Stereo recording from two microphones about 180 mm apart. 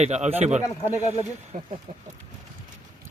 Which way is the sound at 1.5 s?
45° right (ahead or behind).